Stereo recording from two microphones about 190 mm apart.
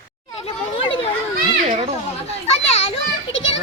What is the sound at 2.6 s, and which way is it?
Speech, 35° left (ahead or behind).